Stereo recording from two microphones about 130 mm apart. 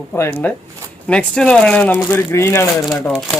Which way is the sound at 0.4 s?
15° left (ahead or behind).